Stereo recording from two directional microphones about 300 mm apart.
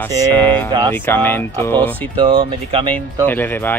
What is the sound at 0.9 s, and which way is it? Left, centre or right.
Speech, centre.